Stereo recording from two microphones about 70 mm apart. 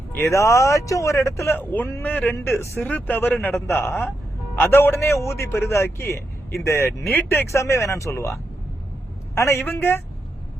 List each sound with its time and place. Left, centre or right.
0.2 s speech: left
1.5 s speech: left
2.3 s a man's voice: left
2.8 s a man's voice: left
7.5 s a man's voice: left